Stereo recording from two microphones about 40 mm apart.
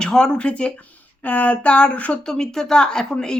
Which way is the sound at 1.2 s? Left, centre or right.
Left.